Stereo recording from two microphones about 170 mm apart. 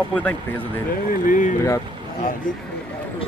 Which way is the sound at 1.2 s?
50° left (ahead or behind).